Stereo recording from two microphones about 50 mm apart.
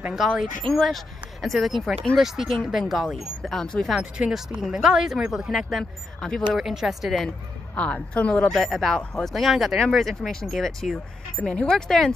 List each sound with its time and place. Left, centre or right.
0.1 s speech: centre
2.5 s speech: centre
4.3 s speech: centre
7.7 s a woman's voice: left
8.5 s speech: centre
11.4 s a woman's voice: left
11.7 s speech: centre